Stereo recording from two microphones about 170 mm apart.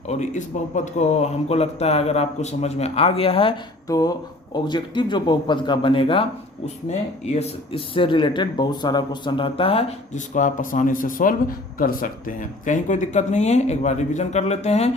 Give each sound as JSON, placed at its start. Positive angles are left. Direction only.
{"t": 0.1, "sound": "a man's voice", "side_deg": 45}
{"t": 3.8, "sound": "speech", "side_deg": 20}
{"t": 10.3, "sound": "a man's voice", "side_deg": 50}